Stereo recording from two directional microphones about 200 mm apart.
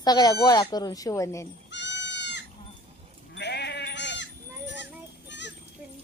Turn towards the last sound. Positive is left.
turn(degrees=60)  # may be behind; listen again after turning